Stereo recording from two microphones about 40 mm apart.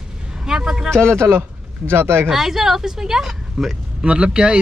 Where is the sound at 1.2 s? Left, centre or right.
Right.